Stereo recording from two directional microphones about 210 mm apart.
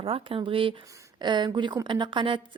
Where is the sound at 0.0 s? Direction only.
25° right (ahead or behind).